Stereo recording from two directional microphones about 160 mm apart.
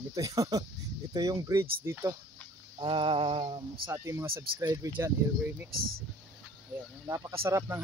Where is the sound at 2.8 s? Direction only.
35° right (ahead or behind).